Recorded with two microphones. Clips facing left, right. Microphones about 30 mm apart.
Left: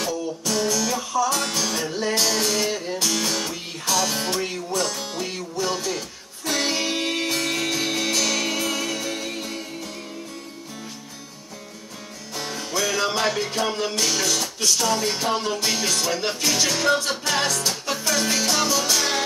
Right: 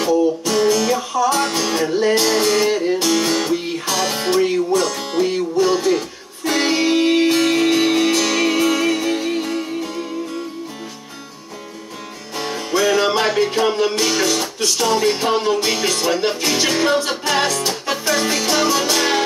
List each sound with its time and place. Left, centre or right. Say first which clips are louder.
0.0 s music: right 10 dB; right
12.4 s music: right 7 dB; right